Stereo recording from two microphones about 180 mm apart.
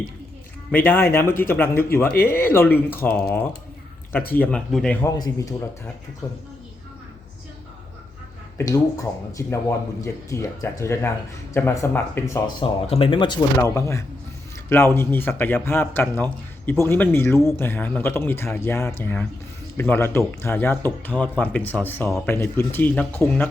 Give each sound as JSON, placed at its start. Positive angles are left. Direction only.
{"t": 0.9, "sound": "speech", "side_deg": 10}
{"t": 2.1, "sound": "speech", "side_deg": 55}
{"t": 2.4, "sound": "speech", "side_deg": 10}
{"t": 4.4, "sound": "speech", "side_deg": 5}
{"t": 5.1, "sound": "speech", "side_deg": 20}
{"t": 8.5, "sound": "speech", "side_deg": 20}
{"t": 12.9, "sound": "speech", "side_deg": 30}